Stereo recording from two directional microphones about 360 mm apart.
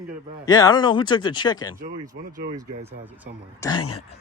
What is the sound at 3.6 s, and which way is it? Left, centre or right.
Speech, centre.